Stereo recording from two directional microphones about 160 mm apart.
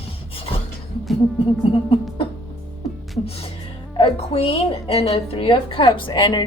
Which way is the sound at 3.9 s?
35° left (ahead or behind).